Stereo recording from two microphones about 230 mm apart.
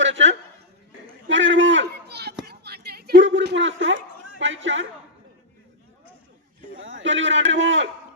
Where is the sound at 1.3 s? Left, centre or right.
Right.